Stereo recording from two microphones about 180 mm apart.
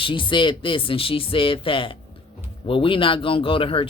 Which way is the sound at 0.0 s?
25° left (ahead or behind).